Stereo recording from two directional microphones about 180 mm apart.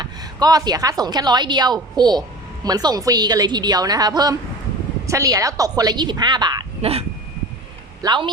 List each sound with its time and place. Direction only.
0.0 s a woman's voice: 20° right (ahead or behind)
8.0 s a woman's voice: 25° right (ahead or behind)